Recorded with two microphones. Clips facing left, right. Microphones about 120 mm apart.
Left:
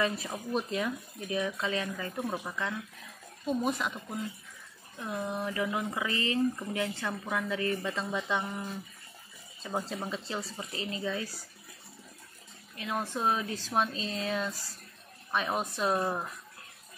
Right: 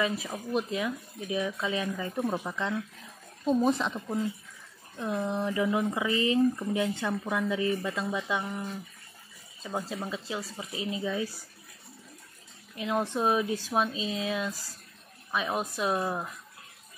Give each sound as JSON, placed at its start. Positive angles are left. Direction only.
{"t": 0.0, "sound": "speech", "side_deg": 0}
{"t": 3.4, "sound": "speech", "side_deg": -30}
{"t": 12.7, "sound": "speech", "side_deg": -20}